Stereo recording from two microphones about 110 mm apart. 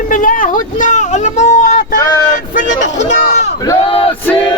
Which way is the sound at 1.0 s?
90° left.